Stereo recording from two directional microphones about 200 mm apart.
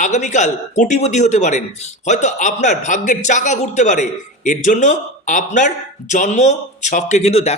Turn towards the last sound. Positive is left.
turn(degrees=30)  # may be behind; listen again after turning